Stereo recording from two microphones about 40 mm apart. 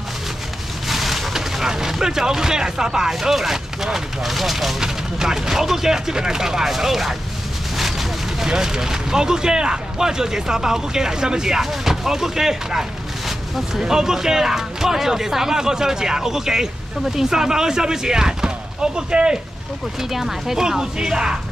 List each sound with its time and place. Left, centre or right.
0.8 s speech: centre
4.7 s speech: centre
7.7 s a sound: centre
8.5 s speech: centre
20.0 s speech: centre